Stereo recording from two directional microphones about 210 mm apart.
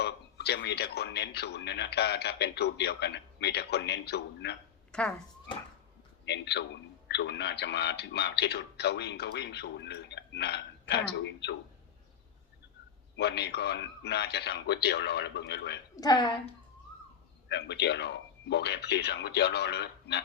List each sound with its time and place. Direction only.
0.0 s a man's voice: 50° left (ahead or behind)
4.9 s speech: 5° left (ahead or behind)
6.2 s a man's voice: 55° left (ahead or behind)
13.1 s a man's voice: 55° left (ahead or behind)
16.0 s a woman's voice: 20° left (ahead or behind)
17.5 s a man's voice: 55° left (ahead or behind)